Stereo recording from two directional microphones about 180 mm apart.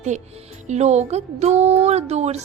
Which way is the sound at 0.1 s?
40° right (ahead or behind).